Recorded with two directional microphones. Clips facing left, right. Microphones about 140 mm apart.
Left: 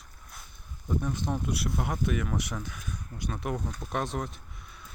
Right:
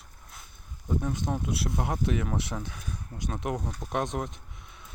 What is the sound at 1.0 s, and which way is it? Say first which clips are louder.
Speech: even; 25° right (ahead or behind).